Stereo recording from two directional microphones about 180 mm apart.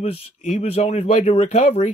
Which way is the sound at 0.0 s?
35° left (ahead or behind).